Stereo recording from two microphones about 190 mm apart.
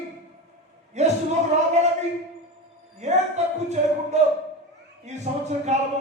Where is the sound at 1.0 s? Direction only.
35° right (ahead or behind).